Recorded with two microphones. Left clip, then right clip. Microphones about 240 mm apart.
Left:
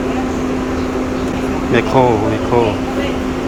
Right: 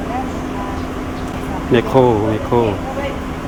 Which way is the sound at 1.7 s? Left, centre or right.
Centre.